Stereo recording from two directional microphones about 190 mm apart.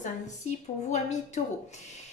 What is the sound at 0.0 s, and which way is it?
Speech, 40° left (ahead or behind).